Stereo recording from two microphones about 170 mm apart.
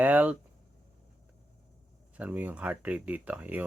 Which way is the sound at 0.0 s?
10° right (ahead or behind).